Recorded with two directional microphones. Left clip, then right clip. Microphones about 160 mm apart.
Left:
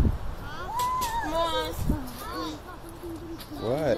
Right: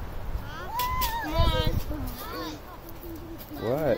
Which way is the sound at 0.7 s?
35° left (ahead or behind).